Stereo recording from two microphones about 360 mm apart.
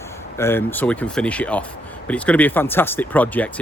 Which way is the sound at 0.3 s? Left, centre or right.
Centre.